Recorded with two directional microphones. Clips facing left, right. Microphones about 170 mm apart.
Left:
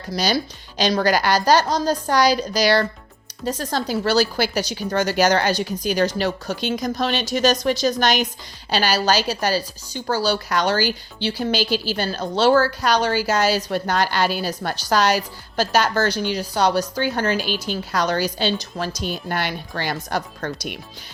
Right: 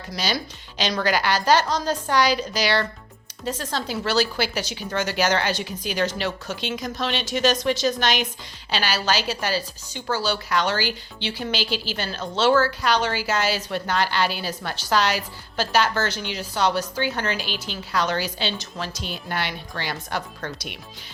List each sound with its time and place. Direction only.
0.1 s a woman's voice: 35° left (ahead or behind)